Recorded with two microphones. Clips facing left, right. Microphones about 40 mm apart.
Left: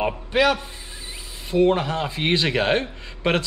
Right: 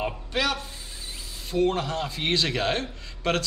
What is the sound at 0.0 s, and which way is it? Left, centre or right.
Speech, centre.